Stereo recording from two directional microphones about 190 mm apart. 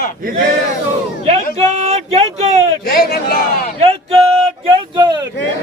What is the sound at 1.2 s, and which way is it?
Speech, 35° right (ahead or behind).